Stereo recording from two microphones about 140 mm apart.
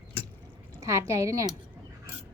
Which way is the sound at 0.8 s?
20° right (ahead or behind).